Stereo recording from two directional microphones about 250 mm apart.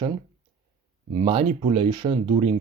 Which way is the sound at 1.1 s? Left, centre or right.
Right.